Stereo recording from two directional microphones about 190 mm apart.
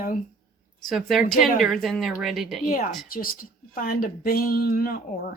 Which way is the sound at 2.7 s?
45° left (ahead or behind).